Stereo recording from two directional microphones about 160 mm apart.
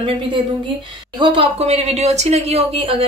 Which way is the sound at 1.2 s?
35° right (ahead or behind).